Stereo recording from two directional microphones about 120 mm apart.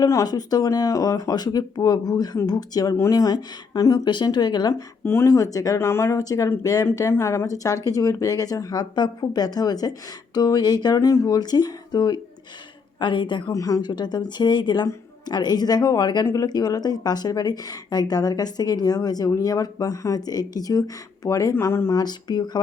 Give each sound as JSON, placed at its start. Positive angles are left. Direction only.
{"t": 0.0, "sound": "speech", "side_deg": 30}
{"t": 5.0, "sound": "speech", "side_deg": 20}
{"t": 13.5, "sound": "speech", "side_deg": 30}
{"t": 22.0, "sound": "speech", "side_deg": 35}